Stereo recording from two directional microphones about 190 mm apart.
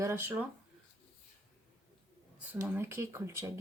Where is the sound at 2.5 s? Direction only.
10° right (ahead or behind).